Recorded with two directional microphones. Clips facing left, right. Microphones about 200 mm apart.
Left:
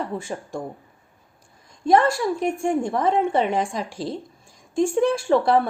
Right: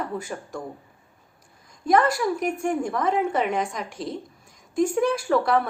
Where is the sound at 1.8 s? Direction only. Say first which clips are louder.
Left 2 dB; 25° left (ahead or behind).